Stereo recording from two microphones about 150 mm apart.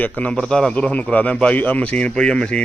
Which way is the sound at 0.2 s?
5° left (ahead or behind).